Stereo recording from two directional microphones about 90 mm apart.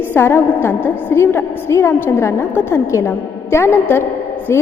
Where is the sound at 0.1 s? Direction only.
25° left (ahead or behind).